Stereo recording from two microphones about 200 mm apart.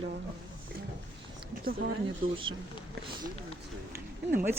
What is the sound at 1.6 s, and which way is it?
Speech, 45° right (ahead or behind).